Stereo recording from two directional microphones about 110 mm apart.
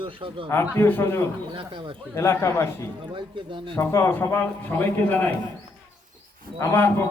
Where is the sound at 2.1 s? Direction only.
25° left (ahead or behind).